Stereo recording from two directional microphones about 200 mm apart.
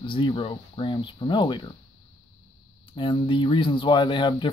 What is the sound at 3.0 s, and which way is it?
Speech, 25° left (ahead or behind).